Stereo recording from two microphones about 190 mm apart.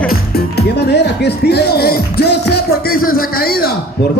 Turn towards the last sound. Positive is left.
turn(degrees=50)  # may be behind; listen again after turning